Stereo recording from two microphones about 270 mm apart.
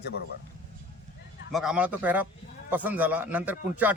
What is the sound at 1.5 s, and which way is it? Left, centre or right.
Speech, centre.